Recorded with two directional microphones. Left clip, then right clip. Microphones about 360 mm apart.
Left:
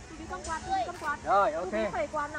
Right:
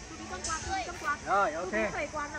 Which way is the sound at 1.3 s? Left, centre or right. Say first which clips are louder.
Left 3 dB; centre.